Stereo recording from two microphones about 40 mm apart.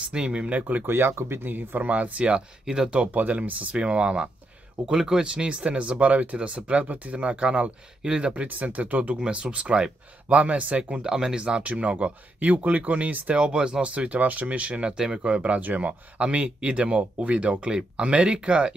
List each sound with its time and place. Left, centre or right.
0.1 s speech: right
0.5 s speech: right
0.8 s speech: right
1.4 s speech: right
1.9 s speech: right
2.6 s speech: centre
2.9 s speech: right
3.2 s speech: right
4.8 s speech: centre
8.5 s speech: right
11.0 s speech: centre
13.9 s speech: right
15.6 s speech: right